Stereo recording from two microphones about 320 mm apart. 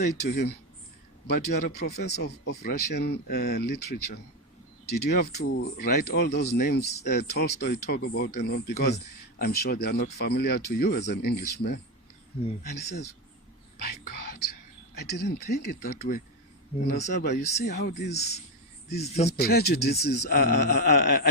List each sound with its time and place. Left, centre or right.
0.0 s speech: left
13.7 s whispering: left
14.9 s speech: left